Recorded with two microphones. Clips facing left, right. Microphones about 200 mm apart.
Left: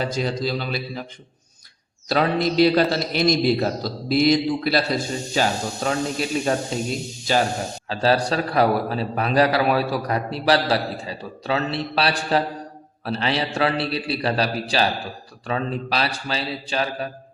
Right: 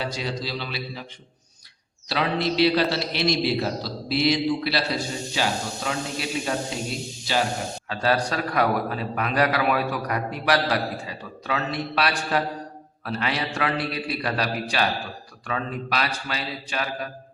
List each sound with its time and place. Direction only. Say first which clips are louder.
0.0 s a man's voice: left 5 dB; 50° left (ahead or behind)
2.0 s a man's voice: left 4 dB; 45° left (ahead or behind)
7.9 s a man's voice: left 4 dB; 30° left (ahead or behind)